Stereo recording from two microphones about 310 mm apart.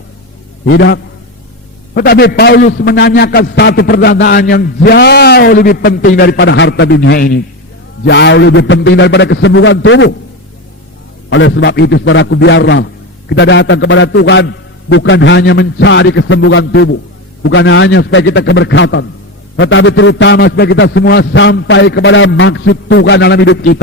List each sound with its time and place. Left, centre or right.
0.7 s a man's voice: left
11.3 s a man's voice: left